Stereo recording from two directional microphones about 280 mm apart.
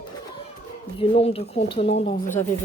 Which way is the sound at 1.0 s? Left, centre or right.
Left.